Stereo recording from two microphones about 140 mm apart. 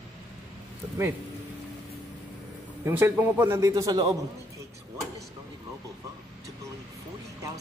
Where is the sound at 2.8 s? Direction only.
15° right (ahead or behind).